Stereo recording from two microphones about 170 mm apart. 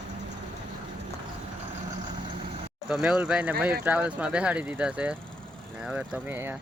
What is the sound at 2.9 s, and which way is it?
Speech, 5° right (ahead or behind).